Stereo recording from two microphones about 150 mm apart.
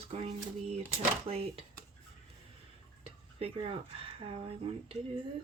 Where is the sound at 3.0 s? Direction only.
40° right (ahead or behind).